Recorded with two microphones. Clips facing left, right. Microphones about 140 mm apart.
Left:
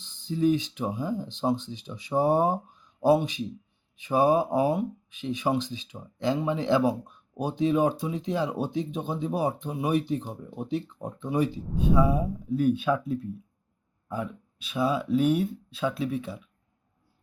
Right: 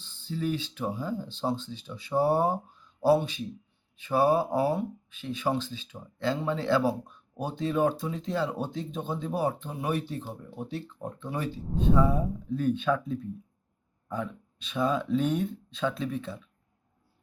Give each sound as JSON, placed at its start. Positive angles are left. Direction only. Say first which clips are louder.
{"t": 0.0, "sound": "speech", "louder": "left 7 dB", "side_deg": 15}